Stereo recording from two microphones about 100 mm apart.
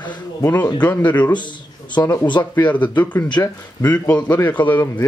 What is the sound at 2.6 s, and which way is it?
Speech, 15° left (ahead or behind).